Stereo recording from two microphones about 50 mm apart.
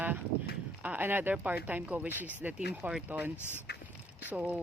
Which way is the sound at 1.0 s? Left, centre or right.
Right.